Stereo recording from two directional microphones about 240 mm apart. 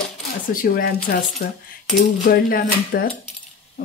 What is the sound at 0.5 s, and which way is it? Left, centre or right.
Speech, left.